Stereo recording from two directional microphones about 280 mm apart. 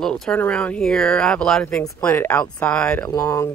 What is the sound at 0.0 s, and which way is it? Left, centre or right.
Speech, centre.